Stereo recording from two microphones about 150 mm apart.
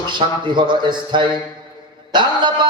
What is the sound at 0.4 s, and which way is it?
A man's voice, 30° right (ahead or behind).